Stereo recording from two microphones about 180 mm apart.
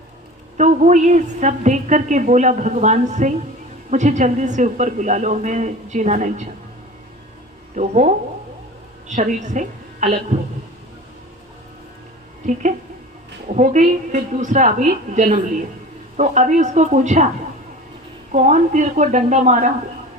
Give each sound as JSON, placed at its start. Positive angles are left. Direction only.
{"t": 0.5, "sound": "a woman's voice", "side_deg": -45}
{"t": 7.8, "sound": "a woman's voice", "side_deg": -40}
{"t": 13.5, "sound": "a woman's voice", "side_deg": -45}
{"t": 18.3, "sound": "a woman's voice", "side_deg": -40}